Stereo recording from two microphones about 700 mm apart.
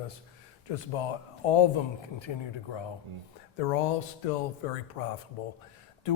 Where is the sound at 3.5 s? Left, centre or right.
Left.